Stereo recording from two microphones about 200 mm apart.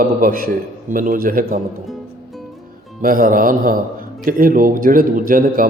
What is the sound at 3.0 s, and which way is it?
A man's voice, 45° right (ahead or behind).